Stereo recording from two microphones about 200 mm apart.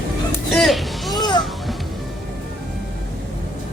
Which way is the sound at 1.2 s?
25° left (ahead or behind).